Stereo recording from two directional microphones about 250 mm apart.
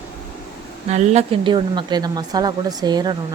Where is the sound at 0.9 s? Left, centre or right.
Right.